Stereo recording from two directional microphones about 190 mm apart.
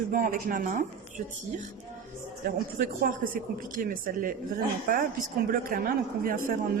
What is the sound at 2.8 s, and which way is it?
Speech, 50° right (ahead or behind).